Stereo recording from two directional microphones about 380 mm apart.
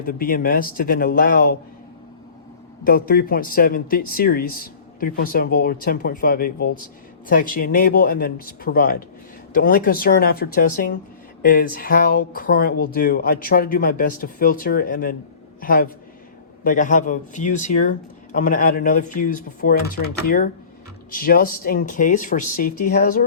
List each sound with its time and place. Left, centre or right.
0.0 s speech: left
2.8 s speech: left